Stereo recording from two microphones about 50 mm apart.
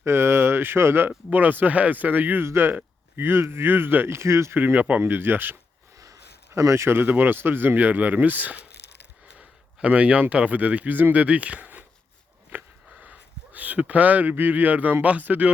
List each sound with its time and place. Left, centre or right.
0.0 s speech: right
1.3 s speech: right
2.4 s speech: right
4.5 s speech: right
6.5 s speech: right
6.9 s speech: right
12.5 s a sound: right
15.0 s speech: right